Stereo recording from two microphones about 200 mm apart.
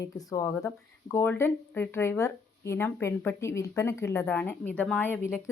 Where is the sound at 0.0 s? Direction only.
15° left (ahead or behind).